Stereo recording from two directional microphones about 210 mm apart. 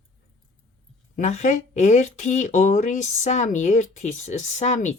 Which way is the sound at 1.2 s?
35° left (ahead or behind).